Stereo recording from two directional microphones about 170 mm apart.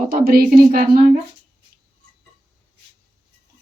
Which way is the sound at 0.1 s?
60° right (ahead or behind).